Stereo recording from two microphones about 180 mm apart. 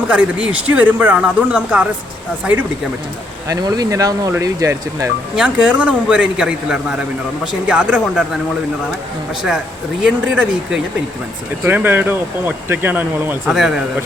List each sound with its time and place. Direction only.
0.1 s speech: 5° right (ahead or behind)
3.5 s speech: 20° right (ahead or behind)
10.0 s speech: 5° right (ahead or behind)